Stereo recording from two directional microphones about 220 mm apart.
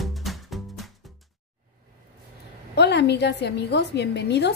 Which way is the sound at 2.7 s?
50° left (ahead or behind).